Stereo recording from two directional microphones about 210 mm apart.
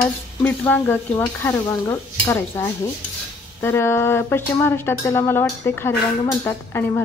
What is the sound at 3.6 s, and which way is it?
Stir, 10° left (ahead or behind).